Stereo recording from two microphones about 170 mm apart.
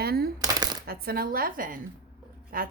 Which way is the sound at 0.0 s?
65° right (ahead or behind).